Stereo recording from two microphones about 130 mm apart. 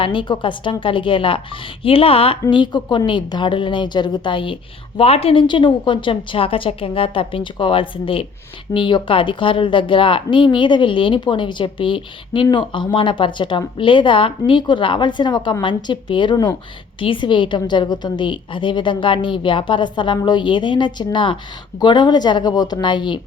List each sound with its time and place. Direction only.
0.0 s a woman's voice: 40° left (ahead or behind)